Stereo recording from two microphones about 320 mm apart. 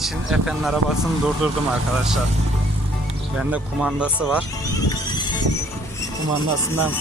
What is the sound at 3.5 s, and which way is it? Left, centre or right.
Speech, centre.